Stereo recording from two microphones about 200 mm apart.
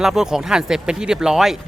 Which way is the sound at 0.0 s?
Centre (ahead or behind).